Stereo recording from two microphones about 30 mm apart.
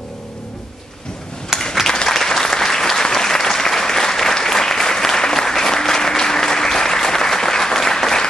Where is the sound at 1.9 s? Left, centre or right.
Centre.